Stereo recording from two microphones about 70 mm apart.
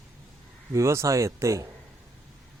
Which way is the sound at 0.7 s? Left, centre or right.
Right.